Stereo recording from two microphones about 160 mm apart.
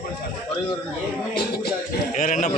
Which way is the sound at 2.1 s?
50° left (ahead or behind).